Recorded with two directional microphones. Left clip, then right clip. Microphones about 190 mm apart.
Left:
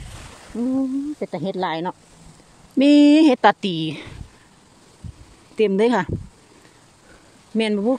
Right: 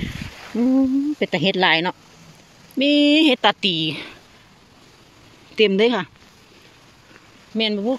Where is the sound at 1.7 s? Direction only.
Centre (ahead or behind).